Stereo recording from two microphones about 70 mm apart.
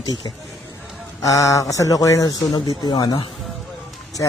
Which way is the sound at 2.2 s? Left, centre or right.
Left.